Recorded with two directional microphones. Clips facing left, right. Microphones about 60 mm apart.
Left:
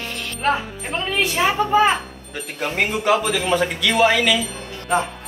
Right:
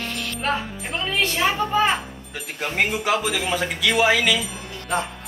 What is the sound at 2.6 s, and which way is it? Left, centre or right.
Speech, centre.